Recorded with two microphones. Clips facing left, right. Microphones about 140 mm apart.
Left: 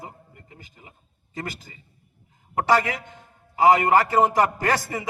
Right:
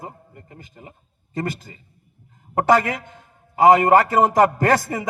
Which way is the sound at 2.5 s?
50° right (ahead or behind).